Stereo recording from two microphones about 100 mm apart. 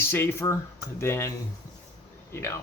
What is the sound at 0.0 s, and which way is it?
Speech, 20° left (ahead or behind).